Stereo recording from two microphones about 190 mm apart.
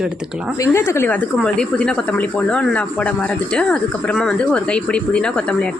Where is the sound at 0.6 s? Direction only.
15° left (ahead or behind).